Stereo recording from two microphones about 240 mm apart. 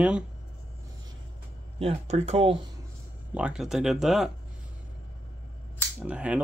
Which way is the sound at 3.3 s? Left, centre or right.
Centre.